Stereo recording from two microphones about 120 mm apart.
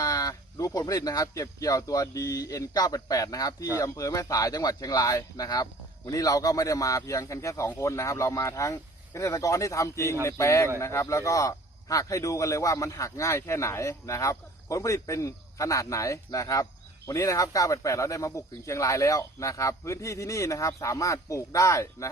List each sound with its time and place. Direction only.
0.0 s speech: 30° left (ahead or behind)